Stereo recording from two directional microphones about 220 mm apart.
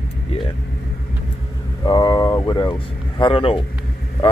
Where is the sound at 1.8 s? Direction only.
20° left (ahead or behind).